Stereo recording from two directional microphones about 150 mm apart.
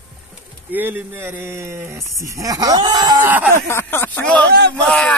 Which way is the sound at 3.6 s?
15° left (ahead or behind).